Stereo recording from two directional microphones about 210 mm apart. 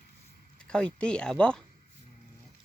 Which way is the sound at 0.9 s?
5° left (ahead or behind).